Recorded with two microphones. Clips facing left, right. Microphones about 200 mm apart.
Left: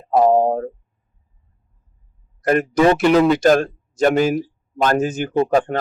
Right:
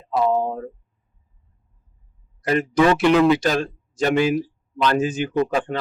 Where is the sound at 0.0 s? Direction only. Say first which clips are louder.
Left 6 dB; 45° left (ahead or behind).